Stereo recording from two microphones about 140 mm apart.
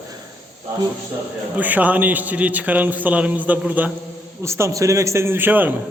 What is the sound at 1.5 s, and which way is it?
A man's voice, 10° right (ahead or behind).